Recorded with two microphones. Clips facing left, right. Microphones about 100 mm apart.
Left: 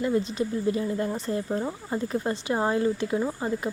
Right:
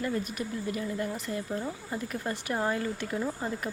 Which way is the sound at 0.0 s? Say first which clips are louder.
Left 6 dB; 20° left (ahead or behind).